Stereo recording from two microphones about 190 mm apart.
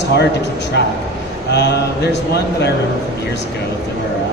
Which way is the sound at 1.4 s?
60° left (ahead or behind).